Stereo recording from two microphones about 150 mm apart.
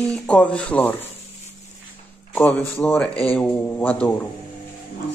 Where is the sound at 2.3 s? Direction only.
10° left (ahead or behind).